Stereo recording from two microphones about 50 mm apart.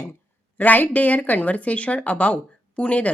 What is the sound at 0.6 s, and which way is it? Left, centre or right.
Speech, left.